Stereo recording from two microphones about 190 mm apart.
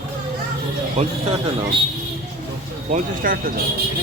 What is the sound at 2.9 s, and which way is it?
Speech, 45° right (ahead or behind).